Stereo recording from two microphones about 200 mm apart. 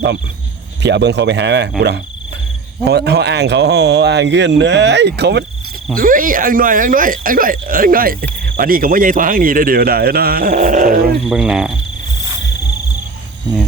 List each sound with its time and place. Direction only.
0.8 s speech: 60° right (ahead or behind)
2.8 s speech: 55° right (ahead or behind)
5.9 s speech: 45° right (ahead or behind)
11.3 s speech: 5° right (ahead or behind)